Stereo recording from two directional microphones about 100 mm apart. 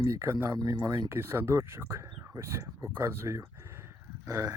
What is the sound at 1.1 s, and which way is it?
Speech, 25° right (ahead or behind).